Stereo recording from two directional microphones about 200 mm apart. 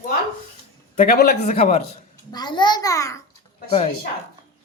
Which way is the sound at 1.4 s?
35° left (ahead or behind).